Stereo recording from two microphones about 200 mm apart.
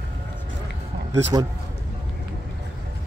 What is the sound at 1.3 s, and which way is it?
Speech, 20° right (ahead or behind).